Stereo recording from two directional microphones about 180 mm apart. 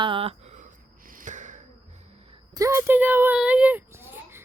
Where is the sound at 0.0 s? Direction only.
30° right (ahead or behind).